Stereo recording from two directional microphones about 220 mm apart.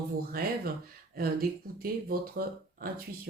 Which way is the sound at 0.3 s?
45° right (ahead or behind).